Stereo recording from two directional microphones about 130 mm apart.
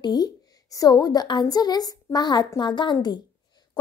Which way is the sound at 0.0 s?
30° left (ahead or behind).